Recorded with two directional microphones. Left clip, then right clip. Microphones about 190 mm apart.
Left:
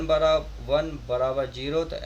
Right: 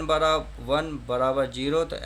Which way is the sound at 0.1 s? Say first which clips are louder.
Left 1 dB; 40° right (ahead or behind).